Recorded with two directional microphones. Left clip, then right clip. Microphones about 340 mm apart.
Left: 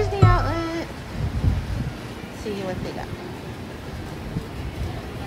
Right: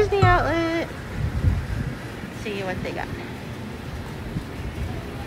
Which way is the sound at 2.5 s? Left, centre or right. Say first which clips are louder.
Even; left.